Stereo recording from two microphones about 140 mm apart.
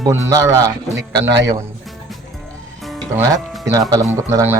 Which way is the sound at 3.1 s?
20° right (ahead or behind).